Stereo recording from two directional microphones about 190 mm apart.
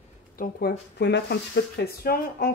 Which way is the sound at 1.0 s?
60° left (ahead or behind).